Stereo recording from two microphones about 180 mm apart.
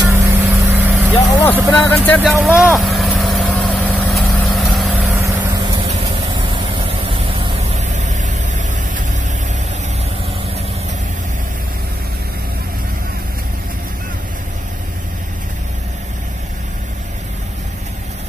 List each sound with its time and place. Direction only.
0.0 s vehicle: 15° right (ahead or behind)
1.3 s speech: 15° left (ahead or behind)
2.4 s vehicle: centre (ahead or behind); by 9.0 s 45° right (ahead or behind)